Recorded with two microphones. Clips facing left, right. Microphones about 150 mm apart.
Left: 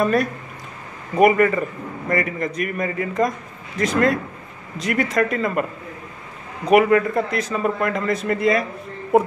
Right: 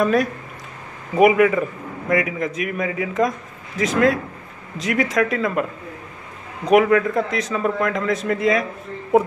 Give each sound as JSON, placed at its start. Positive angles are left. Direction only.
{"t": 0.0, "sound": "a man's voice", "side_deg": 0}